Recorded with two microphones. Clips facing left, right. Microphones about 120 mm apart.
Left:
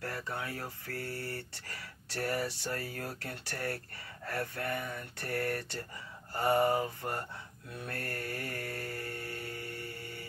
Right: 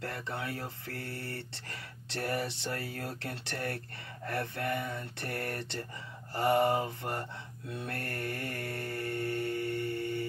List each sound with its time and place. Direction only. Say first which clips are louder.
0.6 s speech: even; 25° right (ahead or behind)
7.8 s mantra: right 1 dB; 25° right (ahead or behind)